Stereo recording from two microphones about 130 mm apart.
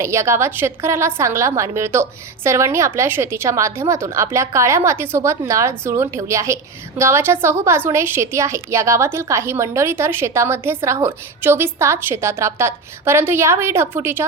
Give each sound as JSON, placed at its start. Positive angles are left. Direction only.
{"t": 0.0, "sound": "a woman's voice", "side_deg": -20}